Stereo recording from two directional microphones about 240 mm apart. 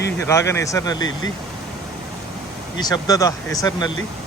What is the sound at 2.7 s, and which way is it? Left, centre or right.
Speech, centre.